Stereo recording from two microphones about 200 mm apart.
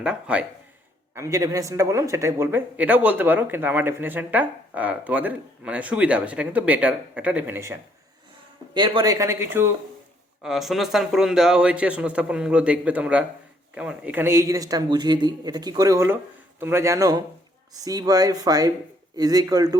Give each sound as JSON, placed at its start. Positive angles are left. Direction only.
{"t": 0.0, "sound": "a man's voice", "side_deg": -5}
{"t": 8.7, "sound": "a man's voice", "side_deg": -20}